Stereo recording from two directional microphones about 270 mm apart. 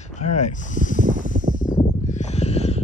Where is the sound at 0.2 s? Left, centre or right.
Left.